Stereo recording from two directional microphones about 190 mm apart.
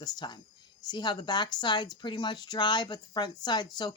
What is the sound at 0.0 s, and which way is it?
Speech, 20° left (ahead or behind).